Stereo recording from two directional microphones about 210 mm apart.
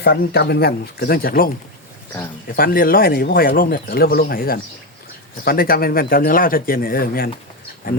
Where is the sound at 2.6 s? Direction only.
45° left (ahead or behind).